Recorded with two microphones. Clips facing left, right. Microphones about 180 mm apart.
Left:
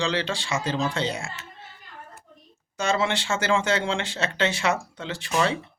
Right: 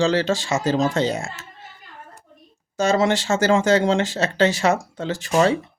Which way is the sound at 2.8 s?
40° right (ahead or behind).